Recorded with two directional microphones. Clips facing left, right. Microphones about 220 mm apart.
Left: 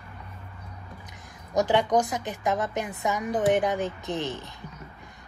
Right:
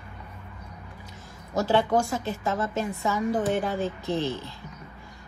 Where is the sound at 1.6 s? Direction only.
20° left (ahead or behind).